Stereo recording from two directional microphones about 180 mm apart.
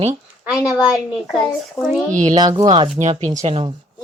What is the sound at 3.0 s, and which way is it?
Speech, 45° right (ahead or behind).